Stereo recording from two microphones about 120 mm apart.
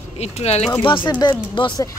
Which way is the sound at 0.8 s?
45° left (ahead or behind).